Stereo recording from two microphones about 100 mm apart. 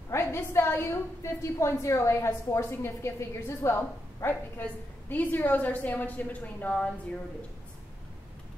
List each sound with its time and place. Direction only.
0.1 s a woman's voice: 25° left (ahead or behind); by 7.2 s 10° left (ahead or behind)